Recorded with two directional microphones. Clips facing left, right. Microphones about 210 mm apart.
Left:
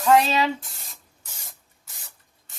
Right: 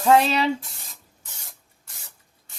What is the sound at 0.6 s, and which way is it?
Speech, centre (ahead or behind).